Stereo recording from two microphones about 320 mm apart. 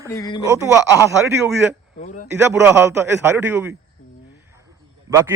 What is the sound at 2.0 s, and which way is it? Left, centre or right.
Speech, left.